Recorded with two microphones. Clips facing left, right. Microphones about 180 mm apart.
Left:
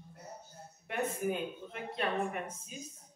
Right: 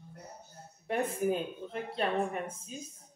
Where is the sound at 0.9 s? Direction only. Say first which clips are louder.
Right 4 dB; 35° right (ahead or behind).